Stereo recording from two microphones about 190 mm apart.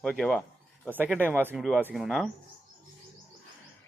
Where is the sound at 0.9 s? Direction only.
10° right (ahead or behind).